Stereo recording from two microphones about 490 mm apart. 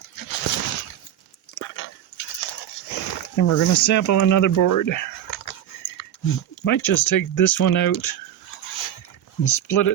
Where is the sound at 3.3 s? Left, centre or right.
Left.